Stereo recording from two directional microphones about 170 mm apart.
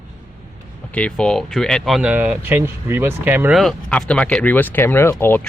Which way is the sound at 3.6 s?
5° left (ahead or behind).